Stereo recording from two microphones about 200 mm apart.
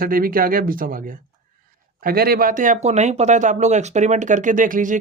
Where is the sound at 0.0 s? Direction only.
45° right (ahead or behind).